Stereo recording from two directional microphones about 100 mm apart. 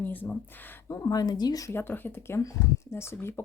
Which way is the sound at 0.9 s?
35° left (ahead or behind).